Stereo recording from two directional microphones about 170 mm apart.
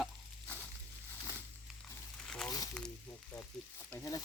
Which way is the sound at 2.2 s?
5° left (ahead or behind).